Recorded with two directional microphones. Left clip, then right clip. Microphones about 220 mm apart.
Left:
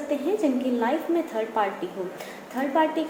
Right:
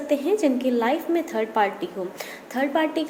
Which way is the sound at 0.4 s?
50° right (ahead or behind).